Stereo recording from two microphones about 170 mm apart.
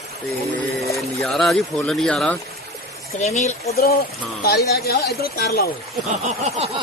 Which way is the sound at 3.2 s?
40° left (ahead or behind).